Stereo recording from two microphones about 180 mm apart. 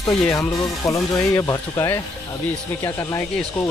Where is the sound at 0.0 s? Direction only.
15° left (ahead or behind).